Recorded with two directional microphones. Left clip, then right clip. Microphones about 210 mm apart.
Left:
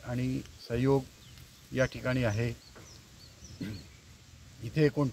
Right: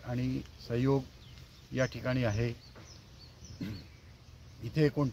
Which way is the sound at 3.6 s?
15° left (ahead or behind).